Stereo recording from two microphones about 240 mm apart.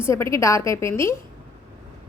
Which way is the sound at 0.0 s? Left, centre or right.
Centre.